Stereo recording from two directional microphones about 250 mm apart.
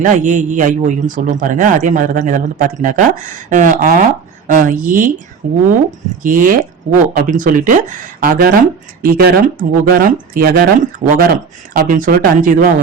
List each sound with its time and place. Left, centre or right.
0.0 s a man's voice: right
9.0 s a man's voice: right